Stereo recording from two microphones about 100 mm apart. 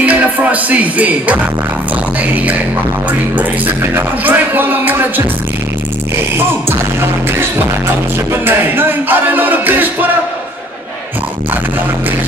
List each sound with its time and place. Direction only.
0.0 s speech: 15° right (ahead or behind)
3.1 s speech: 15° right (ahead or behind)
8.3 s music: 20° right (ahead or behind)